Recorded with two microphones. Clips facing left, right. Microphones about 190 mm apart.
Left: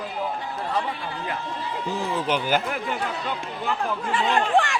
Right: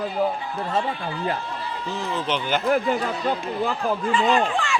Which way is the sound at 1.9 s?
10° left (ahead or behind).